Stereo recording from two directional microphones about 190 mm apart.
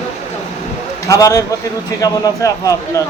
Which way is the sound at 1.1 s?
20° left (ahead or behind).